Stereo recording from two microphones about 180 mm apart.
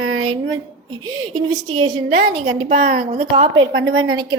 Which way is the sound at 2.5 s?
40° right (ahead or behind).